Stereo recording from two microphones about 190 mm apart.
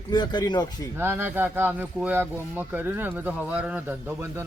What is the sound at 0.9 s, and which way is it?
Speech, 10° right (ahead or behind).